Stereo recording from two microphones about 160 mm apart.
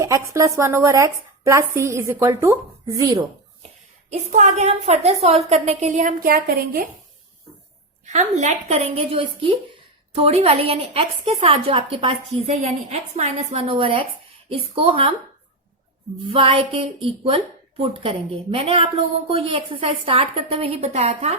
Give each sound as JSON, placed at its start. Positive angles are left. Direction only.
{"t": 0.0, "sound": "speech", "side_deg": -20}
{"t": 4.1, "sound": "a woman's voice", "side_deg": -45}
{"t": 8.0, "sound": "a woman's voice", "side_deg": -45}
{"t": 16.2, "sound": "a woman's voice", "side_deg": -35}